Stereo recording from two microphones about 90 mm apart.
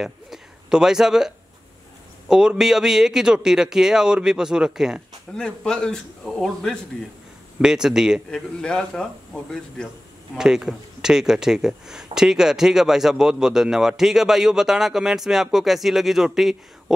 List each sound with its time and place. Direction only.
0.0 s a sound: 5° right (ahead or behind)
2.2 s a man's voice: 10° right (ahead or behind)
5.3 s a man's voice: 10° left (ahead or behind)
7.6 s a man's voice: 5° right (ahead or behind)
8.3 s a man's voice: 10° left (ahead or behind)
10.3 s speech: 5° right (ahead or behind)